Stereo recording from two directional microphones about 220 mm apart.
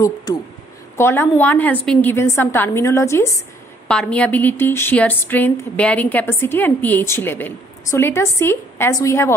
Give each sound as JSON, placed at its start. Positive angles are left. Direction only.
{"t": 0.0, "sound": "a woman's voice", "side_deg": 15}